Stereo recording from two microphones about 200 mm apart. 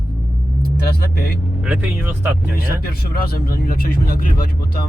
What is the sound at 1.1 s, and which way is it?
Speech, 50° left (ahead or behind).